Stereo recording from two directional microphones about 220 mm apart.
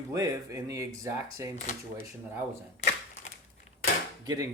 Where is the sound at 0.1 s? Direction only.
15° right (ahead or behind).